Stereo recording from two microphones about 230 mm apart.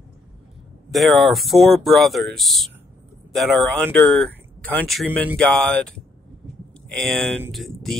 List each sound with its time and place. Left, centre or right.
0.9 s speech: centre
7.0 s speech: centre